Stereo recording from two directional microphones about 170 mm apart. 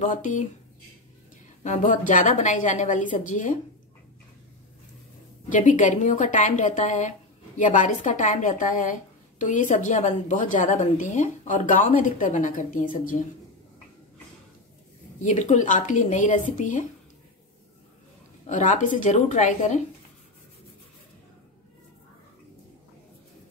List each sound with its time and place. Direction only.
0.0 s a woman's voice: 50° left (ahead or behind)
1.6 s a woman's voice: 45° left (ahead or behind)
5.5 s a woman's voice: 50° left (ahead or behind)
15.2 s a woman's voice: 45° left (ahead or behind)
18.5 s a woman's voice: 50° left (ahead or behind)